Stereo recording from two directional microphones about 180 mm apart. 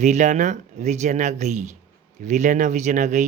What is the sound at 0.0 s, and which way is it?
Speech, 40° right (ahead or behind).